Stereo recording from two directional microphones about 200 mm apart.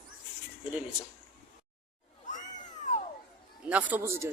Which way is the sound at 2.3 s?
40° left (ahead or behind).